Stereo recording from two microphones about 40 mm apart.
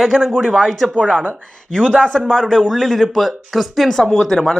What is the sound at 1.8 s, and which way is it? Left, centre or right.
Speech, right.